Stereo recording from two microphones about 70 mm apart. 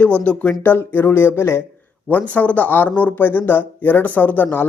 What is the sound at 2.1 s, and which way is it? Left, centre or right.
Speech, left.